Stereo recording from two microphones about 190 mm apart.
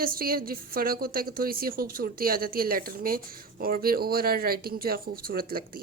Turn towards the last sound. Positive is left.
turn(degrees=-50)  # may be behind; listen again after turning